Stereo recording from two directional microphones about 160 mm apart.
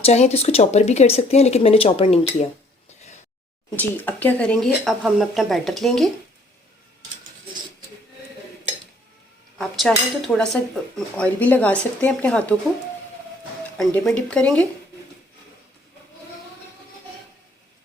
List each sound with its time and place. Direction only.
0.0 s speech: 40° left (ahead or behind)
3.8 s speech: 10° left (ahead or behind)
9.6 s speech: centre (ahead or behind)
13.7 s speech: 5° left (ahead or behind)